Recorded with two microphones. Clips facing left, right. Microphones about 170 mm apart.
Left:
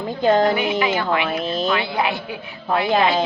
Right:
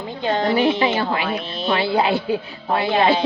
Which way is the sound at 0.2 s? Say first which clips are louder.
Left 5 dB; 45° left (ahead or behind).